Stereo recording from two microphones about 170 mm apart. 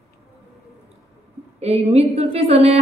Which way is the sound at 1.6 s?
35° right (ahead or behind).